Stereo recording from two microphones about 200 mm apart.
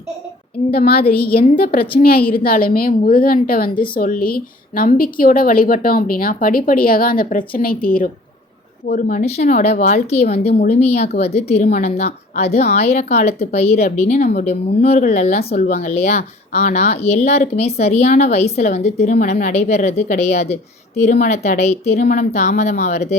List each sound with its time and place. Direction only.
0.7 s a woman's voice: 50° left (ahead or behind); by 23.1 s 35° left (ahead or behind)